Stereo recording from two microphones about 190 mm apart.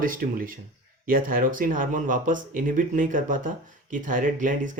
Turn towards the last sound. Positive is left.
turn(degrees=-40)  # may be behind; listen again after turning